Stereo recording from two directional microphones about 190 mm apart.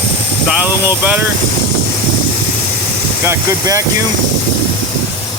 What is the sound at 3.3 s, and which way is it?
Speech, 15° right (ahead or behind).